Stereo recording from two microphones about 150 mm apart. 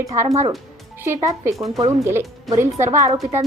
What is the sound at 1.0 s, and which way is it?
Speech, 20° right (ahead or behind).